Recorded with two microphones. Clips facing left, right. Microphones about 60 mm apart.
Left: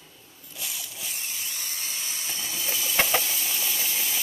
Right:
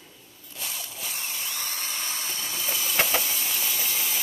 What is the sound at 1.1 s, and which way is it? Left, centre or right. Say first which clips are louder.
Tools: right 3 dB; right.